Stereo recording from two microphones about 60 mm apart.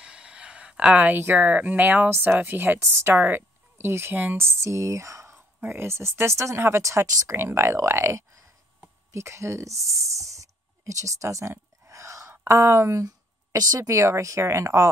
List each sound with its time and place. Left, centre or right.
0.0 s a sound: centre
1.1 s speech: right
2.0 s speech: right
4.5 s speech: right
5.3 s whispering: right
6.1 s speech: right
7.2 s speech: right